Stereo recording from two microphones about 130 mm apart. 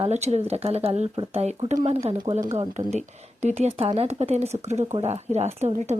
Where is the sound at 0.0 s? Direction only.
55° right (ahead or behind).